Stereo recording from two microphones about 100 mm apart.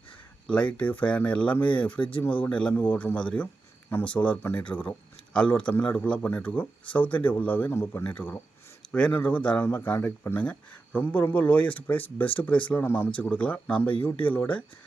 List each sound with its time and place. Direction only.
0.4 s speech: 10° left (ahead or behind)
2.0 s speech: 60° left (ahead or behind)
2.4 s speech: 10° left (ahead or behind)